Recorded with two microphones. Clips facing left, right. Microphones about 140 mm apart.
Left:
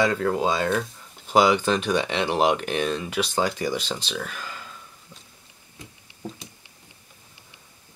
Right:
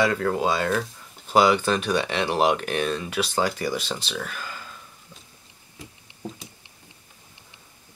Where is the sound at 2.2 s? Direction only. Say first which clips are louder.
Even; 10° right (ahead or behind).